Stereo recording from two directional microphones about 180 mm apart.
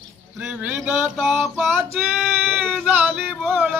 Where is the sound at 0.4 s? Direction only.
10° right (ahead or behind).